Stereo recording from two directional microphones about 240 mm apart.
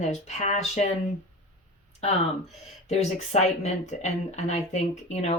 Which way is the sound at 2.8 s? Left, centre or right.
Left.